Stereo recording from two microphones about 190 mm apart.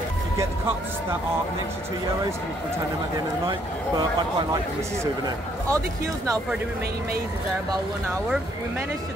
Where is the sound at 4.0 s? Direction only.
20° right (ahead or behind).